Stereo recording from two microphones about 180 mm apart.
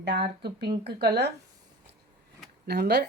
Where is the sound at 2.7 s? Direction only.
65° right (ahead or behind).